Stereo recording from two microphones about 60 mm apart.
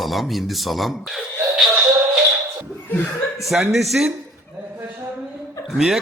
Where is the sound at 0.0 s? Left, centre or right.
Centre.